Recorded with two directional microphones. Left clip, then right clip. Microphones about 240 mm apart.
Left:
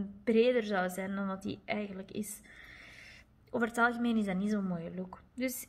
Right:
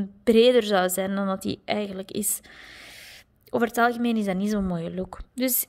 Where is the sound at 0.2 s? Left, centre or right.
Right.